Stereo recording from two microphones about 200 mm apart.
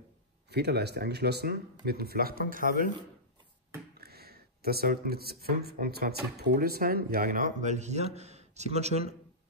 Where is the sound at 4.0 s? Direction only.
50° right (ahead or behind).